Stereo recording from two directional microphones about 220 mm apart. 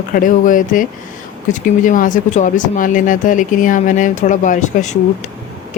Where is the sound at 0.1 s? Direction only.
40° left (ahead or behind).